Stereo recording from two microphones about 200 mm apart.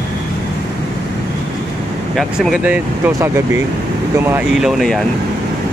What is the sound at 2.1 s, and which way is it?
Speech, centre (ahead or behind).